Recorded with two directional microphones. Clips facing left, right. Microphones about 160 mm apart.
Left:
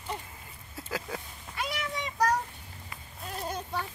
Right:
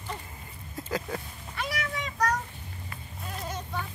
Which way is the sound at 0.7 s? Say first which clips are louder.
Right 4 dB; 5° left (ahead or behind).